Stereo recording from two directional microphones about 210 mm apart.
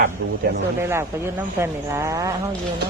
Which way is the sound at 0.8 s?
10° right (ahead or behind).